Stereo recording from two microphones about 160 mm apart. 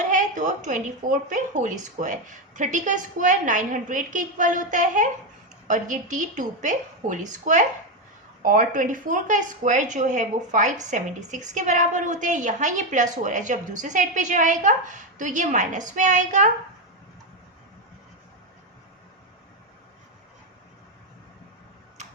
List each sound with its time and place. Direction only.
0.1 s speech: 50° right (ahead or behind)